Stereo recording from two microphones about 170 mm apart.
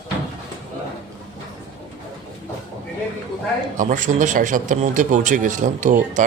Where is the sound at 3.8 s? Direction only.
50° right (ahead or behind).